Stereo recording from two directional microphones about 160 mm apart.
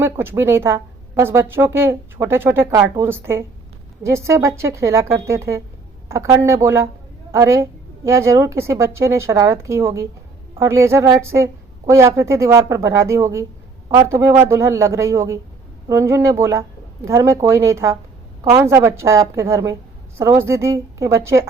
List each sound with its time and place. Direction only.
0.0 s speech: 15° right (ahead or behind)